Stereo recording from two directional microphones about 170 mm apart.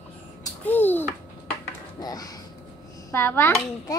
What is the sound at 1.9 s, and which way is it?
A child's voice, 20° left (ahead or behind).